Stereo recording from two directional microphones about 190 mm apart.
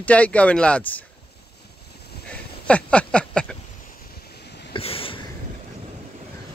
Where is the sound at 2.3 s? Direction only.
5° left (ahead or behind).